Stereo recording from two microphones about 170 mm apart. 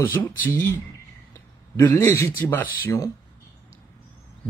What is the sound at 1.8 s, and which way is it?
Speech, 15° left (ahead or behind).